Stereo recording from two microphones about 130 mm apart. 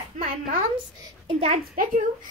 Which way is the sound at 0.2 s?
90° right.